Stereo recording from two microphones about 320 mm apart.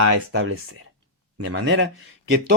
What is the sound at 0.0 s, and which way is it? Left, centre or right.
Speech, right.